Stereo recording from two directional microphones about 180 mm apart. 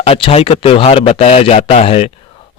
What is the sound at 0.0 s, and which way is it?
Speech, 30° left (ahead or behind).